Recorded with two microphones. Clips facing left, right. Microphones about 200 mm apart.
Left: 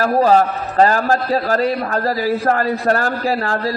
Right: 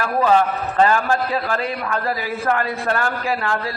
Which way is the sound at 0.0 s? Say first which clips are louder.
Left 4 dB; 35° left (ahead or behind).